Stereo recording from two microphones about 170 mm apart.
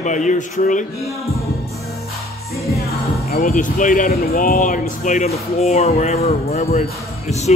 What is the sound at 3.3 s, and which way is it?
Speech, 55° left (ahead or behind).